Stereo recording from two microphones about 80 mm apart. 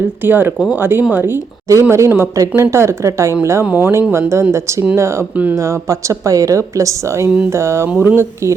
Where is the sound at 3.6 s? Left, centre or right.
Right.